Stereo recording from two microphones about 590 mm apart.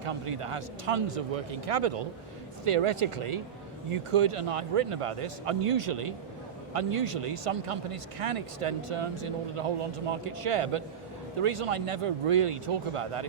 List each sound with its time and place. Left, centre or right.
0.0 s speech: right